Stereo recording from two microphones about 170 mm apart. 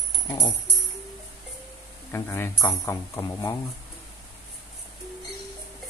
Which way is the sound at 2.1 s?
15° left (ahead or behind).